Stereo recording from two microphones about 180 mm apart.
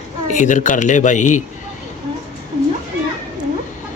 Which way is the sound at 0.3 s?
45° left (ahead or behind).